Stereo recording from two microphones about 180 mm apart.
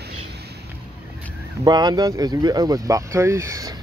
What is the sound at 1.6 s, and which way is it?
Speech, 25° right (ahead or behind).